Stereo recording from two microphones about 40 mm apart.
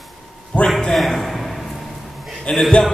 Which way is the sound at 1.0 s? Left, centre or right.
Centre.